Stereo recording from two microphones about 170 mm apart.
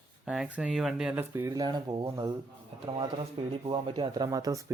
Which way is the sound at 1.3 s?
15° right (ahead or behind).